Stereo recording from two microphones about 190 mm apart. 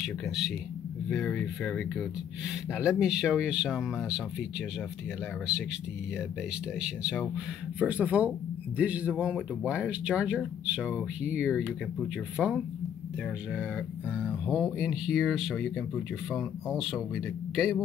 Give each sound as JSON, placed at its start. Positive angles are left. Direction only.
{"t": 1.0, "sound": "speech", "side_deg": 5}
{"t": 6.8, "sound": "speech", "side_deg": -5}
{"t": 14.2, "sound": "speech", "side_deg": 0}